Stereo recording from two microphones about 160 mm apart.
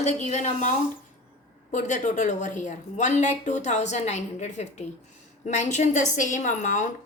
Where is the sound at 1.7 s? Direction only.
50° left (ahead or behind).